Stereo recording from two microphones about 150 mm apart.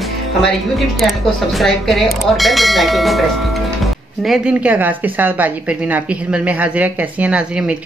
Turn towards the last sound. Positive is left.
turn(degrees=-10)  # may be behind; listen again after turning